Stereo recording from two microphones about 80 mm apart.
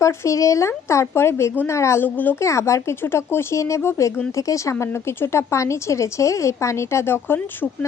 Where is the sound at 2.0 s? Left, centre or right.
Left.